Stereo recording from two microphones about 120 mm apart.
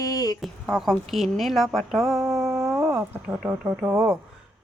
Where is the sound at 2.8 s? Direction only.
15° right (ahead or behind).